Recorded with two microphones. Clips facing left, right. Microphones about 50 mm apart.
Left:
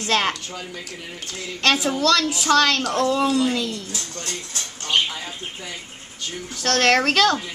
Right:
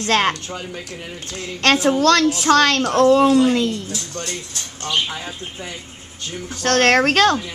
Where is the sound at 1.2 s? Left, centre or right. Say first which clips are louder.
Right 3 dB; right.